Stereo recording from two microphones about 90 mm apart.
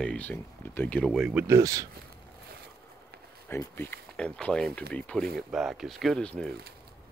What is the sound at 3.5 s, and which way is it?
Speech, 25° left (ahead or behind).